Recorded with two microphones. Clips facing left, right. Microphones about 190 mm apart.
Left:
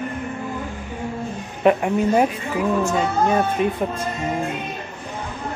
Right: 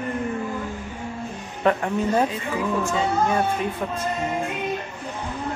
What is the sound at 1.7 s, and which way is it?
Speech, 15° left (ahead or behind).